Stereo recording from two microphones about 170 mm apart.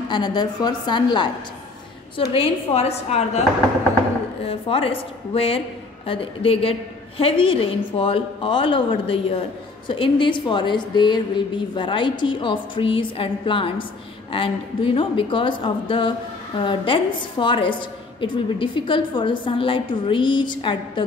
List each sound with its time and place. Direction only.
0.1 s a woman's voice: 25° left (ahead or behind)
2.3 s a woman's voice: 35° left (ahead or behind)
4.5 s a woman's voice: 35° left (ahead or behind)